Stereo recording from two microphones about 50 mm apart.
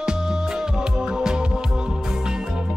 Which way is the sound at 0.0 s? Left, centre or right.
Centre.